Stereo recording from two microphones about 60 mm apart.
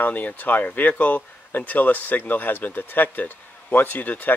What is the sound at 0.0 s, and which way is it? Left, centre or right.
Speech, left.